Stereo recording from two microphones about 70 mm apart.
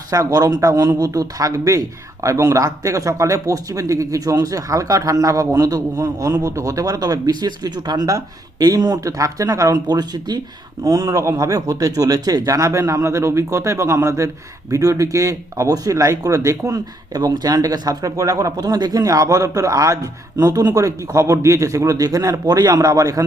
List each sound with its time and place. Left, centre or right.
0.1 s speech: right
9.8 s speech: right
10.8 s speech: right
19.0 s speech: right